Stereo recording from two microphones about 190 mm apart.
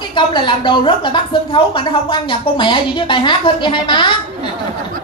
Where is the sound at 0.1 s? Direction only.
25° left (ahead or behind).